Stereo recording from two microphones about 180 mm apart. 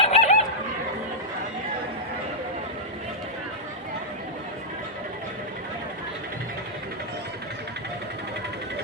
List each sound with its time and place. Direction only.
0.0 s chicken: 35° left (ahead or behind)